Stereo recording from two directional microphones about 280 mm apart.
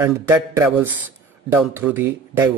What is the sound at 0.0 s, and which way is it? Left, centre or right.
A man's voice, centre.